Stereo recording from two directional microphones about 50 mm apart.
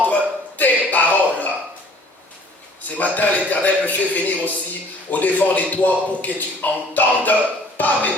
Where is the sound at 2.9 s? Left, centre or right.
Left.